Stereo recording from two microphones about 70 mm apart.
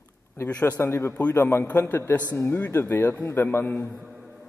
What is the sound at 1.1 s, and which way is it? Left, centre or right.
A man's voice, left.